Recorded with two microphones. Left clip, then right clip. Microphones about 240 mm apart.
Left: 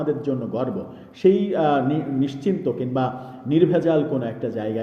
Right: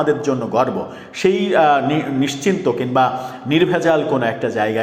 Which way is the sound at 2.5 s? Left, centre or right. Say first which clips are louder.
Right 8 dB; right.